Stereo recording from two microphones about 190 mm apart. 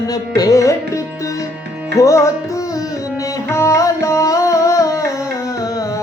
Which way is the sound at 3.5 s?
15° left (ahead or behind).